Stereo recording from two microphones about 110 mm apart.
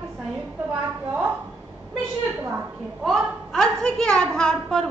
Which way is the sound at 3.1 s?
5° left (ahead or behind).